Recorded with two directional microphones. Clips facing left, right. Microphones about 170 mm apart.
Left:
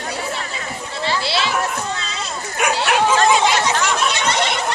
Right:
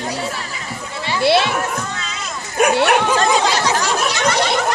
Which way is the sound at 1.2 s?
55° right (ahead or behind).